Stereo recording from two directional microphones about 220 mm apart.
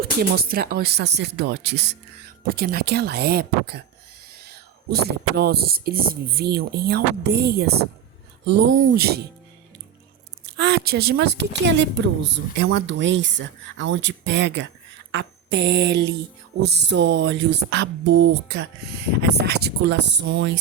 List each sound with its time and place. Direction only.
0.2 s speech: 45° right (ahead or behind)
10.4 s speech: 50° right (ahead or behind)